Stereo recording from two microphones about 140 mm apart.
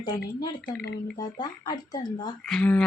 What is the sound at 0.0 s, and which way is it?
Speech, 30° left (ahead or behind).